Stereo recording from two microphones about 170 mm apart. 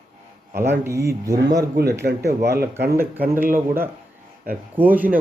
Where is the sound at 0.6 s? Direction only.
15° right (ahead or behind).